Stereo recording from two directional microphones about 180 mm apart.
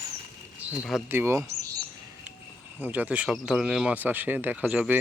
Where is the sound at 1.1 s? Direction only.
15° right (ahead or behind).